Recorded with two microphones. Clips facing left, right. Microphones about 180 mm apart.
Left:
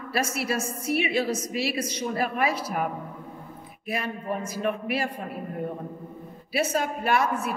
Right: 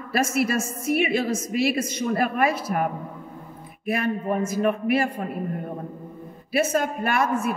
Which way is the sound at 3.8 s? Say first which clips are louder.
Right 6 dB; 55° right (ahead or behind).